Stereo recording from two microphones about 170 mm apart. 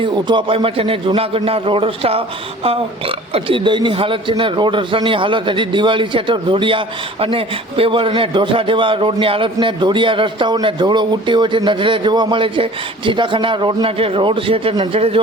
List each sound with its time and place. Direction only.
0.0 s a man's voice: 30° right (ahead or behind)